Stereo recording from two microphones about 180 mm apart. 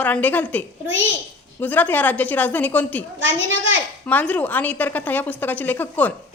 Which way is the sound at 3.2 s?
90° right.